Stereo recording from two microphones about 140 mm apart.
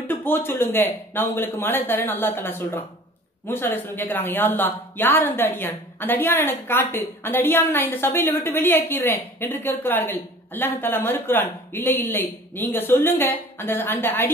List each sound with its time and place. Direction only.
0.1 s a woman's voice: 15° left (ahead or behind)